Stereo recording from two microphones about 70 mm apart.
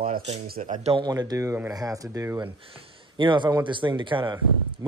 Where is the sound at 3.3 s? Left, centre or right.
Right.